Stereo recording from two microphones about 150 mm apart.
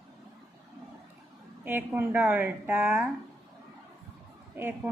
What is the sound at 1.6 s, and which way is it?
A woman's voice, 15° right (ahead or behind).